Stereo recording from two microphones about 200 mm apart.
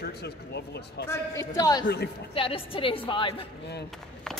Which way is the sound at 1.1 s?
15° left (ahead or behind).